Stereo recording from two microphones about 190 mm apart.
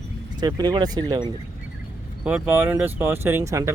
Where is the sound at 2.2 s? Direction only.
10° right (ahead or behind).